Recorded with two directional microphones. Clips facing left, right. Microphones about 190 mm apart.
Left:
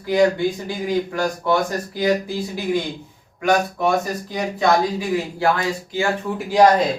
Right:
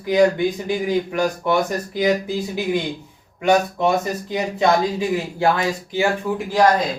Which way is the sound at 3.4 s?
20° right (ahead or behind).